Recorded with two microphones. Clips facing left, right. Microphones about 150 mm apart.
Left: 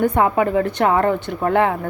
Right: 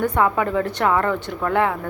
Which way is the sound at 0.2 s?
20° left (ahead or behind).